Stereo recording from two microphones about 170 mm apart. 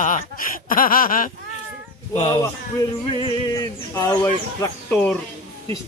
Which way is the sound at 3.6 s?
20° left (ahead or behind).